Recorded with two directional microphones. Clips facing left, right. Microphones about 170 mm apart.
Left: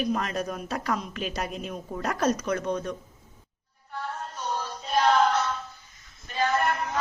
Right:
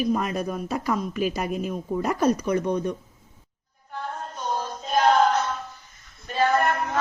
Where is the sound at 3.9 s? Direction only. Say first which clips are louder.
Right 2 dB; 45° right (ahead or behind).